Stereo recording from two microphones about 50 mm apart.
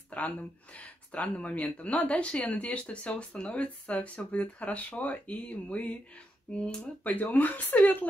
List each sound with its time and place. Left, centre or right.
0.1 s speech: left
7.1 s speech: left